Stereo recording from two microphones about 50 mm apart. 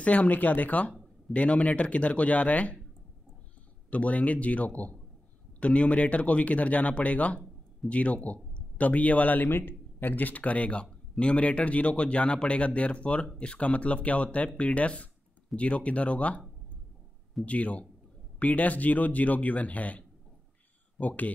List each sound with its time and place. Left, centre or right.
0.0 s speech: left
3.9 s speech: left
17.5 s speech: left